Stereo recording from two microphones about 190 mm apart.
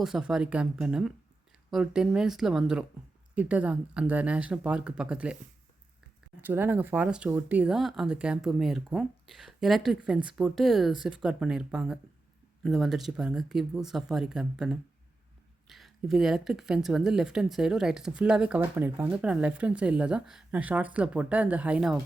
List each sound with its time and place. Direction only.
0.0 s a woman's voice: centre (ahead or behind)
6.4 s a woman's voice: 10° right (ahead or behind)